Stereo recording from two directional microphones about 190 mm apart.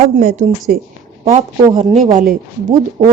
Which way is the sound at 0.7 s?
50° right (ahead or behind).